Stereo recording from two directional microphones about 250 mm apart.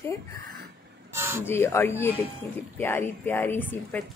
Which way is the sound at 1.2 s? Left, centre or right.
Centre.